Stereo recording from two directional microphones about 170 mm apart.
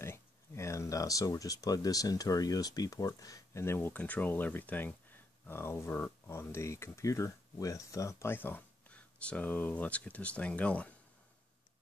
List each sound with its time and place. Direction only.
0.0 s speech: 15° left (ahead or behind)